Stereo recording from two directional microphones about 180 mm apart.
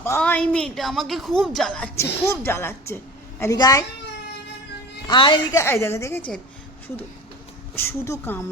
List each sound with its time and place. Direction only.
0.0 s a woman's voice: 10° left (ahead or behind)
2.2 s a woman's voice: 15° left (ahead or behind)
5.0 s a woman's voice: 25° left (ahead or behind)
5.5 s a woman's voice: 15° left (ahead or behind)
7.8 s a woman's voice: 15° left (ahead or behind)